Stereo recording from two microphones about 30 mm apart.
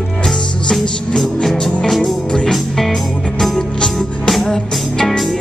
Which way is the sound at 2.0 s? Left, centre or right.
Left.